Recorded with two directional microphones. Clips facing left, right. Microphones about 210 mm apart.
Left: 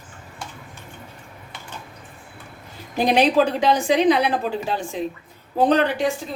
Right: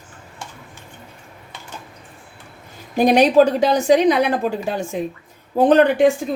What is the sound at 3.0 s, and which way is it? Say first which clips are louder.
A woman's voice: right 5 dB; 45° right (ahead or behind).